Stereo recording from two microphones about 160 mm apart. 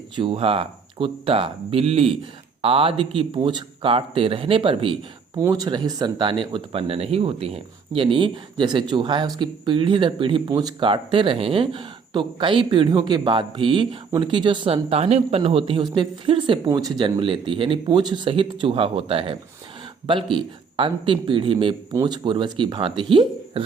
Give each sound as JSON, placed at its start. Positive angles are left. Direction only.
{"t": 0.2, "sound": "speech", "side_deg": -35}
{"t": 5.4, "sound": "speech", "side_deg": -25}